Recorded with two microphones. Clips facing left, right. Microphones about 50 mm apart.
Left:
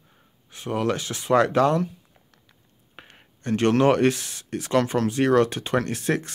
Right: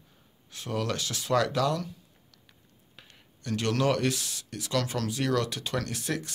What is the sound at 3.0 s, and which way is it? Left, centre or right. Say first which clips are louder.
Speech: left 7 dB; left.